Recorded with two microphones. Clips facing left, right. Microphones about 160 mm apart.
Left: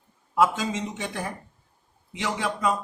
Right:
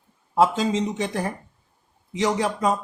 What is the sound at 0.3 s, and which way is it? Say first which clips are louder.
Speech: right 3 dB; 30° right (ahead or behind).